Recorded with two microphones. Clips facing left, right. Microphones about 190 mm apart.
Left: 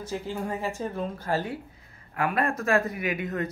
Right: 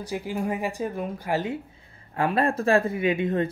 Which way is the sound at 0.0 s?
15° right (ahead or behind).